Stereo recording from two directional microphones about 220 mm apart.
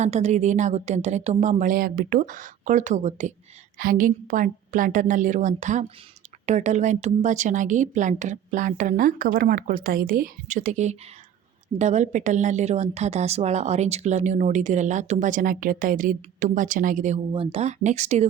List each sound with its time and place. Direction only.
0.0 s a woman's voice: 30° right (ahead or behind)